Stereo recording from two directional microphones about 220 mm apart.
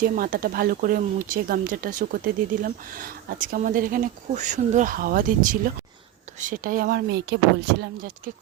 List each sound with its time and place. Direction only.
0.0 s speech: 40° right (ahead or behind)